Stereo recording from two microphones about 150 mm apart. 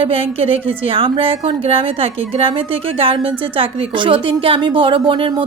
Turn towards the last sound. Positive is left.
turn(degrees=-30)  # may be behind; listen again after turning